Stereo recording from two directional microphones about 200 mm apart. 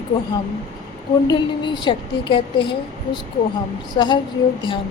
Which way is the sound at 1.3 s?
25° left (ahead or behind).